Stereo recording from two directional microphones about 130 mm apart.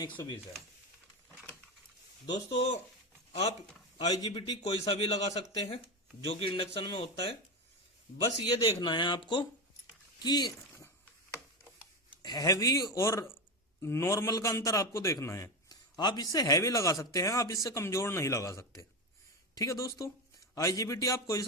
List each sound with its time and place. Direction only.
0.0 s speech: 30° left (ahead or behind)
2.2 s speech: 35° left (ahead or behind)
3.9 s speech: 30° left (ahead or behind)
4.6 s a man's voice: 45° left (ahead or behind)
6.2 s speech: 40° left (ahead or behind)
8.2 s speech: 30° left (ahead or behind)
12.2 s a man's voice: 30° left (ahead or behind)
15.7 s a man's voice: 30° left (ahead or behind)